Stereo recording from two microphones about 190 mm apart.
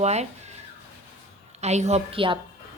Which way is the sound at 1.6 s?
35° right (ahead or behind).